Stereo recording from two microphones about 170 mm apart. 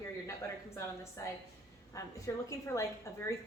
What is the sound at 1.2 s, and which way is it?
A woman's voice, 20° left (ahead or behind).